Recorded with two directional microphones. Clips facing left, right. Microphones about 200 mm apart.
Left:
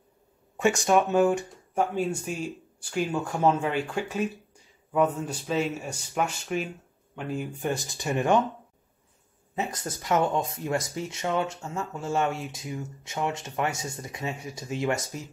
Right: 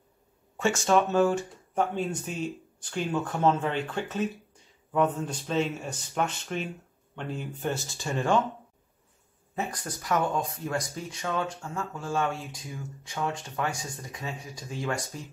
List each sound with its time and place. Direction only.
0.6 s speech: 15° left (ahead or behind)
9.6 s speech: 25° left (ahead or behind)